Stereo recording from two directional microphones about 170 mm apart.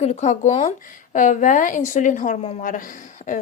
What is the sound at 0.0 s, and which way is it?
A woman's voice, 40° left (ahead or behind).